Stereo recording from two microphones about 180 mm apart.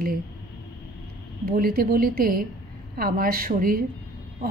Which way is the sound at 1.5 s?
55° right (ahead or behind).